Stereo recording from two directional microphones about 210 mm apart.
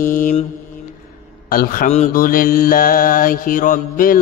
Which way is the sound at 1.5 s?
45° left (ahead or behind).